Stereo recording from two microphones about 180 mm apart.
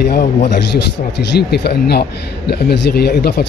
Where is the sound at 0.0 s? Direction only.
60° left (ahead or behind).